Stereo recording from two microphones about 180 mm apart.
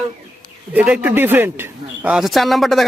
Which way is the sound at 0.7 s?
10° right (ahead or behind).